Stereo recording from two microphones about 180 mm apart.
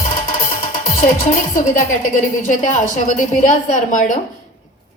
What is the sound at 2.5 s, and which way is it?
A woman's voice, 45° left (ahead or behind).